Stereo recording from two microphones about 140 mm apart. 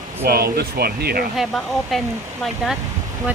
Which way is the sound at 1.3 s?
Centre (ahead or behind).